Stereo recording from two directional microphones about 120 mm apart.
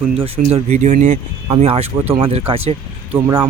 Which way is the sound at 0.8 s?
90° right.